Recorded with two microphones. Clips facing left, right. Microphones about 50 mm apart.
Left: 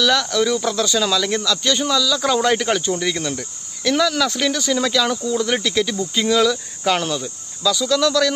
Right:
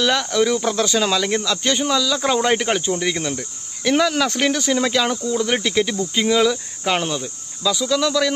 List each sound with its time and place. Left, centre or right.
0.0 s cricket: right
1.5 s speech: right
1.9 s cricket: right
3.8 s speech: right
5.3 s cricket: centre